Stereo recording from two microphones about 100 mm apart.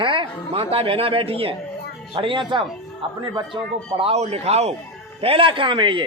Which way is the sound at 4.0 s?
80° right.